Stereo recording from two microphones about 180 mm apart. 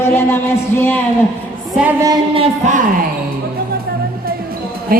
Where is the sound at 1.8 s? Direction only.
10° right (ahead or behind).